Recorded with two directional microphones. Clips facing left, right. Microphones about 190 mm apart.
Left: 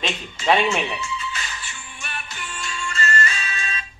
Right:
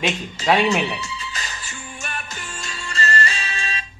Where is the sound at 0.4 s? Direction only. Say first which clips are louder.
Even; 35° right (ahead or behind).